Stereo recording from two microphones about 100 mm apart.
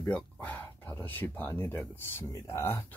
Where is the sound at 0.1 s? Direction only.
15° left (ahead or behind).